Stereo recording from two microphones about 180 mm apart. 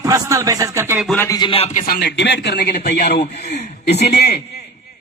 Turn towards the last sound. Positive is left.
turn(degrees=65)  # may be behind; listen again after turning